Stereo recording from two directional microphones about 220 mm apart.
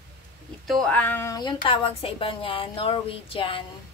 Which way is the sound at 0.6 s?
Centre (ahead or behind).